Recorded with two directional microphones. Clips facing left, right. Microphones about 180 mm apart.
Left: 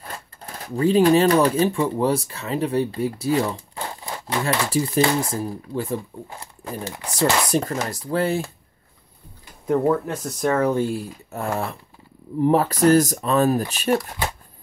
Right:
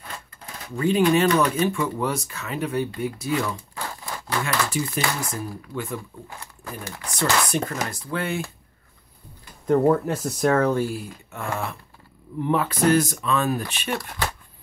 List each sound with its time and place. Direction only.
0.7 s speech: 35° left (ahead or behind)
9.7 s speech: centre (ahead or behind)
10.7 s speech: 25° left (ahead or behind)
11.3 s speech: 35° left (ahead or behind)